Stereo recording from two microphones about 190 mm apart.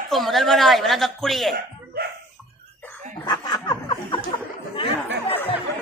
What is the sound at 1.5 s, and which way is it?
Speech, 55° right (ahead or behind).